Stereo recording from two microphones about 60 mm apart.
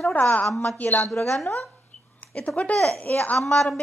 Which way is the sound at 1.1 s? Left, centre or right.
Left.